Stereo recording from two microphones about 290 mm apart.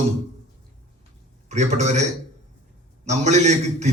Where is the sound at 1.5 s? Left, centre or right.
Right.